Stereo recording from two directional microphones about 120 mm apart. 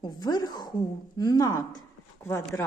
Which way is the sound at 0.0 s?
35° left (ahead or behind).